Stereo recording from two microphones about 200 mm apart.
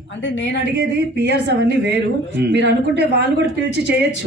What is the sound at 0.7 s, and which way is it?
Speech, 55° right (ahead or behind).